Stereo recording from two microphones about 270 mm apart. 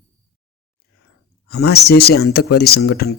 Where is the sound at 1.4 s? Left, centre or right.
Left.